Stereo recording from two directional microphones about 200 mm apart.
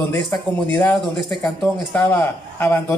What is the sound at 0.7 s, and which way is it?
A man's voice, 5° left (ahead or behind).